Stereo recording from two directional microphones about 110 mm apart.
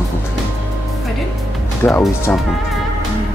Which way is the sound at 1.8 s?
20° left (ahead or behind).